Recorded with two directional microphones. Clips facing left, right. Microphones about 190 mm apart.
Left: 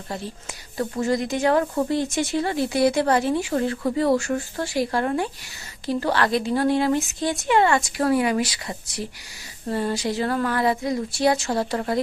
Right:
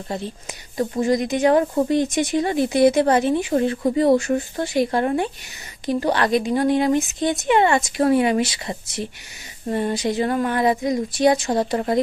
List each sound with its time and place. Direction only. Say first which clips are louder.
0.8 s speech: right 3 dB; 20° right (ahead or behind)